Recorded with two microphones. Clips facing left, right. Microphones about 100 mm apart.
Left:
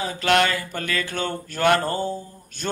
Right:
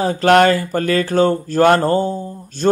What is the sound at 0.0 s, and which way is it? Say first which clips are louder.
Mantra: right 9 dB; 40° right (ahead or behind).